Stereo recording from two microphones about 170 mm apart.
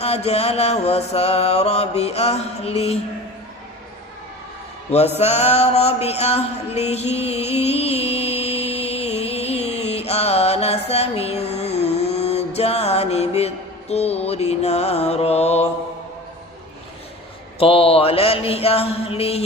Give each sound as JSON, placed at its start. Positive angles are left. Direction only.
{"t": 0.0, "sound": "mantra", "side_deg": 35}
{"t": 5.1, "sound": "mantra", "side_deg": 40}
{"t": 17.6, "sound": "mantra", "side_deg": 35}